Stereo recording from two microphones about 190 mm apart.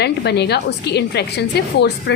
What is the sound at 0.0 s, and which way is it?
A woman's voice, 60° left (ahead or behind).